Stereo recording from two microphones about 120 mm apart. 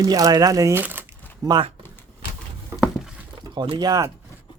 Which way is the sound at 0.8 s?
15° right (ahead or behind).